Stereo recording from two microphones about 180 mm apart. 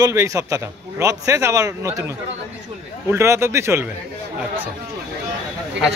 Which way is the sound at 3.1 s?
15° right (ahead or behind).